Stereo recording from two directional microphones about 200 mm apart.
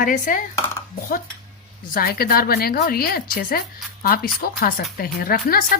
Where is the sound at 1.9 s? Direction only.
50° left (ahead or behind).